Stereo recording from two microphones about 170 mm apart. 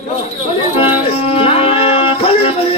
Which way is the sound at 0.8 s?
35° left (ahead or behind).